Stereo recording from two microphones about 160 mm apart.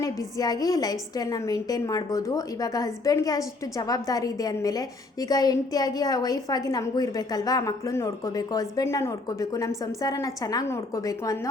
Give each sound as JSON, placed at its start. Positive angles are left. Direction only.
{"t": 0.0, "sound": "a woman's voice", "side_deg": 20}